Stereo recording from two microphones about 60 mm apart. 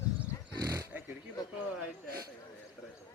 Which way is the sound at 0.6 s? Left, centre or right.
Right.